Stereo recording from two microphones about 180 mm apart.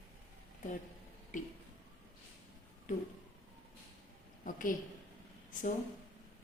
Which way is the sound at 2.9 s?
45° left (ahead or behind).